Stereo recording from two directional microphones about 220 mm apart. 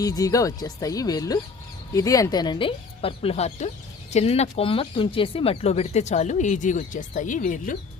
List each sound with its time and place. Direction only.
0.0 s speech: 15° left (ahead or behind); by 7.8 s 35° left (ahead or behind)